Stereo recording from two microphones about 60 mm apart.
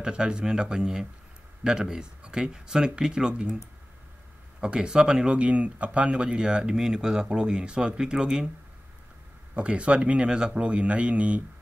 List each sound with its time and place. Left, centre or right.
0.0 s speech: centre
4.6 s speech: centre
5.4 s speech: right
9.6 s speech: centre